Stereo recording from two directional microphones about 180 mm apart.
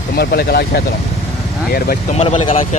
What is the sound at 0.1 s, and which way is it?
Speech, 60° left (ahead or behind).